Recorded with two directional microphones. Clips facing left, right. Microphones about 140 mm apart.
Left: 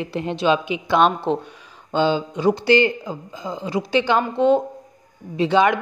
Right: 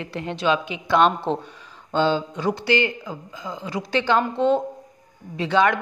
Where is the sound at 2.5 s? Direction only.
30° left (ahead or behind).